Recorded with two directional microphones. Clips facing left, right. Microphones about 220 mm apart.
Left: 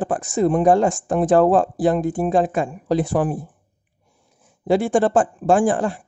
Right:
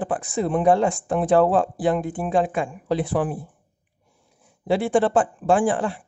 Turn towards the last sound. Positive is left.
turn(degrees=45)  # may be behind; listen again after turning